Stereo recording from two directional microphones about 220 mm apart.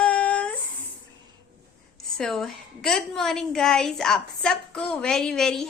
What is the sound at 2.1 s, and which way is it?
A woman's voice, centre (ahead or behind).